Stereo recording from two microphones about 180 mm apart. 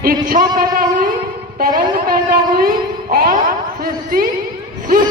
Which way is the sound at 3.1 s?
55° right (ahead or behind).